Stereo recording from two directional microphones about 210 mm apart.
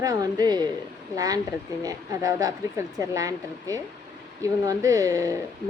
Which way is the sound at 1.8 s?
15° right (ahead or behind).